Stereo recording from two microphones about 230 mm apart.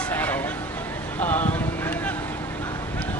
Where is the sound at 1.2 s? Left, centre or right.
Centre.